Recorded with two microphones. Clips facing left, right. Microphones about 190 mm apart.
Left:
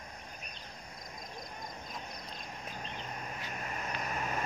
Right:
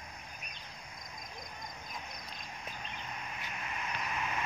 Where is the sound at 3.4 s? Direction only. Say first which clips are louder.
Left 1 dB; 40° left (ahead or behind).